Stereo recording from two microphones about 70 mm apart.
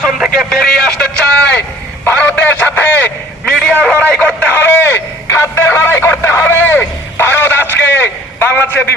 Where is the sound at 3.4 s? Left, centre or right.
Centre.